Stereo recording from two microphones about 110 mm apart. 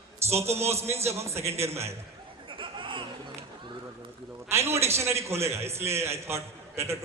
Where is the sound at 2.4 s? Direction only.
50° right (ahead or behind).